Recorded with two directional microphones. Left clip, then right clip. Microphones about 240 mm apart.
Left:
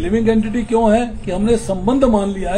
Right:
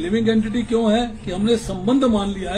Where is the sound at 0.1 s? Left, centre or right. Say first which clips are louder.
Left 4 dB; centre.